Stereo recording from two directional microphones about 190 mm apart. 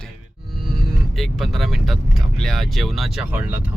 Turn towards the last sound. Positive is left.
turn(degrees=-10)  # may be behind; listen again after turning